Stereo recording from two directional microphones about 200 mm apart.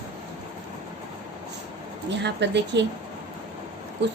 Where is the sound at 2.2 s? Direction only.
60° right (ahead or behind).